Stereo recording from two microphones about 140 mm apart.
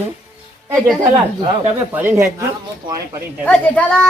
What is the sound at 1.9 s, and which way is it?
Speech, 15° right (ahead or behind).